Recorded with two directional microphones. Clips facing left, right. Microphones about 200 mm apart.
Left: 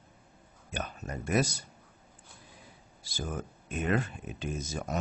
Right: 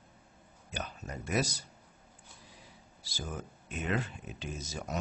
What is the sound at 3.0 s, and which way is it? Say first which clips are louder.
Speech: left 4 dB; 50° left (ahead or behind).